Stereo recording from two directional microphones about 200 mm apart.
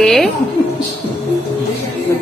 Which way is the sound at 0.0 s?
Centre (ahead or behind).